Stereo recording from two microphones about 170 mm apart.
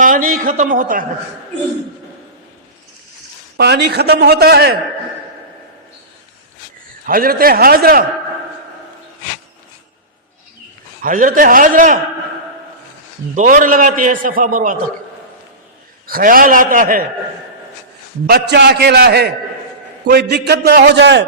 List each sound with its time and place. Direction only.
0.0 s a man's voice: 55° right (ahead or behind)
3.6 s a man's voice: 70° right (ahead or behind)
7.0 s a man's voice: 60° right (ahead or behind)
11.0 s a man's voice: 50° right (ahead or behind)
13.3 s a man's voice: 50° right (ahead or behind)
16.0 s a man's voice: 55° right (ahead or behind)
18.3 s a man's voice: 75° right (ahead or behind); by 21.2 s 90° right